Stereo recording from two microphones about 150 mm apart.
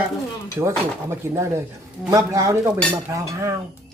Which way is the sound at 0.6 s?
25° right (ahead or behind).